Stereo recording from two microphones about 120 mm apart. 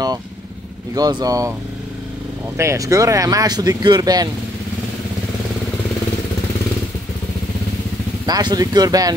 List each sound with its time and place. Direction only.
0.9 s speech: 30° right (ahead or behind)
2.5 s speech: 25° right (ahead or behind)
8.3 s speech: 35° right (ahead or behind)